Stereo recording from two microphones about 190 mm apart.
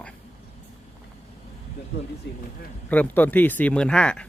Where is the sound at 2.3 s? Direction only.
65° left (ahead or behind).